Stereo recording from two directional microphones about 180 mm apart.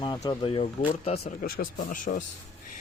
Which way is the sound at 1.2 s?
50° left (ahead or behind).